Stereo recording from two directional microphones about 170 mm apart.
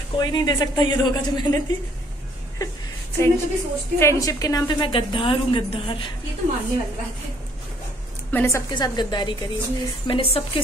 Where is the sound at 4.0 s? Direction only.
20° left (ahead or behind).